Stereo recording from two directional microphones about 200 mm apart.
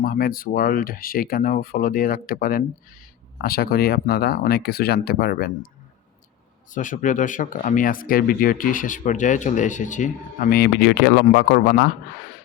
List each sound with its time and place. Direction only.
0.0 s speech: 45° left (ahead or behind)
6.7 s speech: 40° left (ahead or behind); by 11.9 s 55° left (ahead or behind)